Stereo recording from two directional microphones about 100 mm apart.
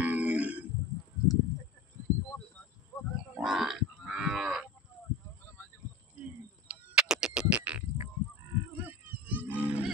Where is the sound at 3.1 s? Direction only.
5° right (ahead or behind).